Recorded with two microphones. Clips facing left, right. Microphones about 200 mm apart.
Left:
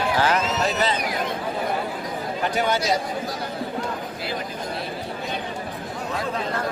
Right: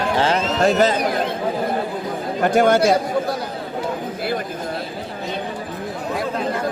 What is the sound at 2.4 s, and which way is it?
Speech, 50° right (ahead or behind).